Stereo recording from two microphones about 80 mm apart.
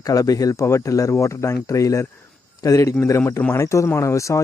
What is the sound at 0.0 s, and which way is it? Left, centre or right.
Speech, left.